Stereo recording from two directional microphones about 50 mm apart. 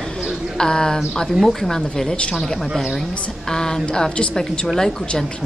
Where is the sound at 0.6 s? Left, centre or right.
Centre.